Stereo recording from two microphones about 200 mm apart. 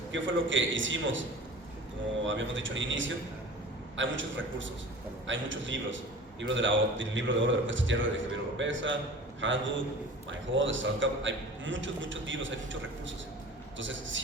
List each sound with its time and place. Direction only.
0.1 s a man's voice: 70° right (ahead or behind)
2.2 s a man's voice: 70° right (ahead or behind)
13.7 s a man's voice: 70° right (ahead or behind)